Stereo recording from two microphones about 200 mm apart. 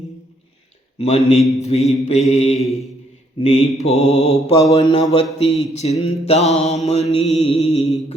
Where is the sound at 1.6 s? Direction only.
30° left (ahead or behind).